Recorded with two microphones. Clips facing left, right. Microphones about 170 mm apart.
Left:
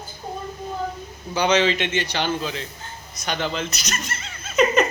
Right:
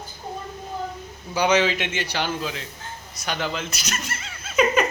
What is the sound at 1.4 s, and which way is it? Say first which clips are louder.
A man's voice: left 1 dB; 10° right (ahead or behind).